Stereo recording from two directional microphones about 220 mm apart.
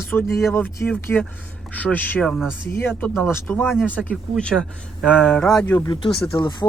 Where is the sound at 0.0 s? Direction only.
10° left (ahead or behind).